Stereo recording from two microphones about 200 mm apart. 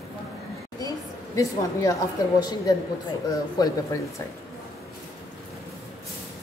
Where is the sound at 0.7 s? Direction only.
15° left (ahead or behind).